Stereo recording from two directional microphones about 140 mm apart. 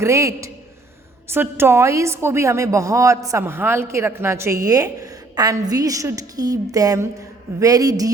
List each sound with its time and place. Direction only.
0.0 s a woman's voice: 20° right (ahead or behind)